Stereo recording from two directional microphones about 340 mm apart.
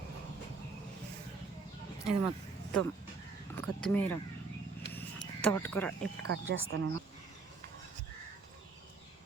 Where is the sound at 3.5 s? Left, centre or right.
Centre.